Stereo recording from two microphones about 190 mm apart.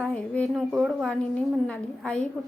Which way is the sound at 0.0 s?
5° left (ahead or behind).